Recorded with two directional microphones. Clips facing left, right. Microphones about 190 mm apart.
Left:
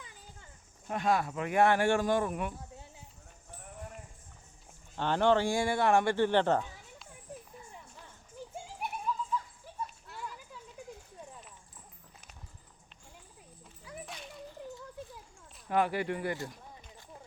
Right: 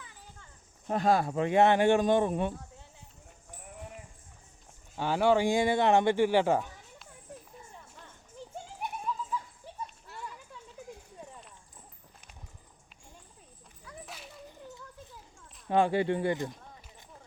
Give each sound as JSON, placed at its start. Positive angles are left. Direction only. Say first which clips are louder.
{"t": 0.9, "sound": "speech", "louder": "right 4 dB", "side_deg": -35}
{"t": 4.9, "sound": "speech", "louder": "right 1 dB", "side_deg": -10}
{"t": 9.8, "sound": "dog", "louder": "left 1 dB", "side_deg": 0}
{"t": 14.0, "sound": "cat", "louder": "left 1 dB", "side_deg": 0}
{"t": 15.7, "sound": "speech", "louder": "right 4 dB", "side_deg": -25}